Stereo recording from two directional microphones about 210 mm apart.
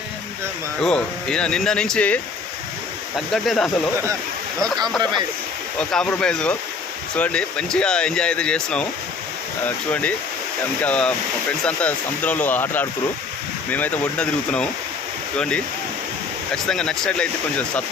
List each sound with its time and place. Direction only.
0.8 s speech: 5° left (ahead or behind)
3.3 s speech: centre (ahead or behind)
4.8 s speech: 20° right (ahead or behind)
5.9 s speech: 5° left (ahead or behind)